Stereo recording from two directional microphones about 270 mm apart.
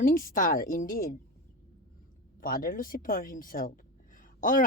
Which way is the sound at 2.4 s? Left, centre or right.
Left.